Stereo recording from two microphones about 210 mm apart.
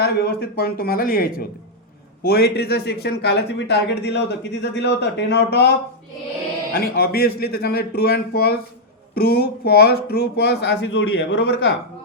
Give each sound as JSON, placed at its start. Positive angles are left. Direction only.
{"t": 0.0, "sound": "a man's voice", "side_deg": 50}
{"t": 6.7, "sound": "a man's voice", "side_deg": 45}